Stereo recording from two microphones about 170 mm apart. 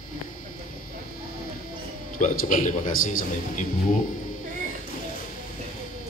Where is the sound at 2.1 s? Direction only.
50° left (ahead or behind).